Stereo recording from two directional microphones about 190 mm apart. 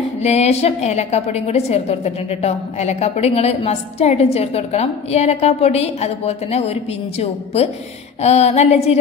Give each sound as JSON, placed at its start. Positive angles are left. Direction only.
{"t": 0.2, "sound": "a woman's voice", "side_deg": 35}